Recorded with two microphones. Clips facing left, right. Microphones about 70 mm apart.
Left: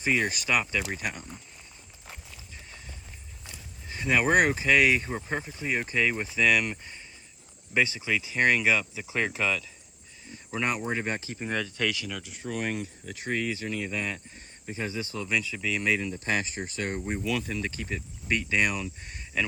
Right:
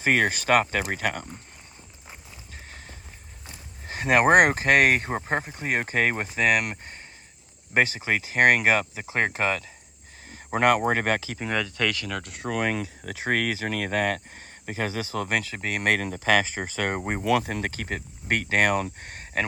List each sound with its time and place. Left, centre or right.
0.0 s speech: right
0.6 s speech: right
0.9 s speech: right
3.8 s speech: right
10.6 s speech: right
11.5 s speech: right
12.4 s speech: right